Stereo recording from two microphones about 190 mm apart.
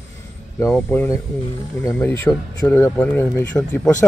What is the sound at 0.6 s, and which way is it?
Speech, 10° left (ahead or behind).